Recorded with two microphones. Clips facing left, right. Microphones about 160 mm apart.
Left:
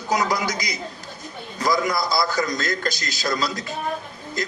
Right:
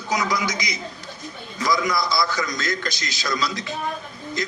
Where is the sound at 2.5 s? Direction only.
40° left (ahead or behind).